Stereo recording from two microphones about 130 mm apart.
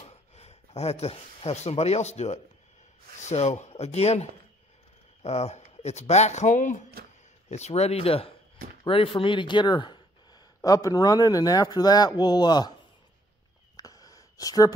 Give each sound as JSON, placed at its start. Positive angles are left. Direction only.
{"t": 0.0, "sound": "speech", "side_deg": 55}
{"t": 7.4, "sound": "speech", "side_deg": 60}
{"t": 13.7, "sound": "a sound", "side_deg": 30}